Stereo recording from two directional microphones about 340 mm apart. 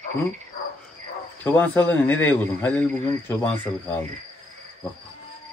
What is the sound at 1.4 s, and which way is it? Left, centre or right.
Speech, centre.